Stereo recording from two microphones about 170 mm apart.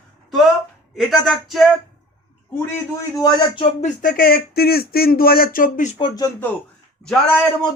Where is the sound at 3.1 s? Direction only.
20° left (ahead or behind).